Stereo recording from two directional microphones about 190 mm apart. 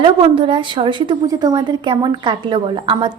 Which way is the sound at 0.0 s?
25° right (ahead or behind).